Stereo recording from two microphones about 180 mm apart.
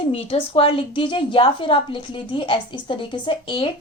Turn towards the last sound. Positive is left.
turn(degrees=30)  # may be behind; listen again after turning